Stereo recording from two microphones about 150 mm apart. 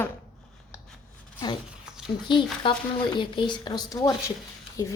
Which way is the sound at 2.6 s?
35° left (ahead or behind).